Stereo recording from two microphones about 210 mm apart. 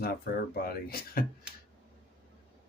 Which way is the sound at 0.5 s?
45° left (ahead or behind).